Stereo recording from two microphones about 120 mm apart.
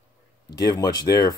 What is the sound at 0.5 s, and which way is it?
Speech, 35° left (ahead or behind).